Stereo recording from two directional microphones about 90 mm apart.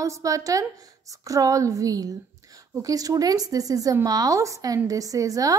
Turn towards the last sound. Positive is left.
turn(degrees=-40)  # may be behind; listen again after turning